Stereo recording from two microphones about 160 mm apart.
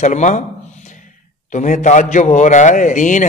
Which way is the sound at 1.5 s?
50° left (ahead or behind).